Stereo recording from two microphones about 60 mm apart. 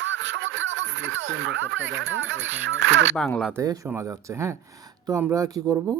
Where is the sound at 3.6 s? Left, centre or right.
Right.